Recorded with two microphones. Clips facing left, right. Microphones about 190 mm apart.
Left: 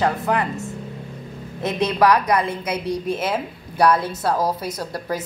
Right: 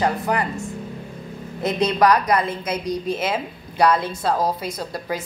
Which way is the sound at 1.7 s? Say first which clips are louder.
Even; 5° left (ahead or behind).